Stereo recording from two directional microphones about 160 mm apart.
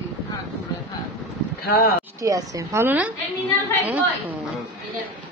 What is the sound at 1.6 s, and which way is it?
Speech, 75° left (ahead or behind).